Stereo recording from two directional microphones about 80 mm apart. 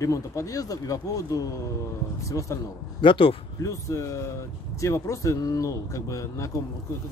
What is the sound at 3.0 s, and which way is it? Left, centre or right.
Speech, left.